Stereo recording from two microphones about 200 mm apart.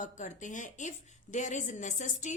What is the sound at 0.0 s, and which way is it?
A woman's voice, 40° left (ahead or behind).